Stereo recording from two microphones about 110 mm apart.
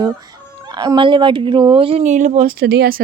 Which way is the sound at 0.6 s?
40° right (ahead or behind).